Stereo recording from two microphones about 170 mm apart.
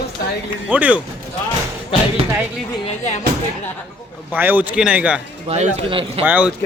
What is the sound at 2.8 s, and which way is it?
Speech, 40° left (ahead or behind).